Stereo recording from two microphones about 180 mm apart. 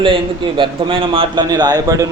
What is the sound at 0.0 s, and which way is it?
A man's voice, 30° right (ahead or behind).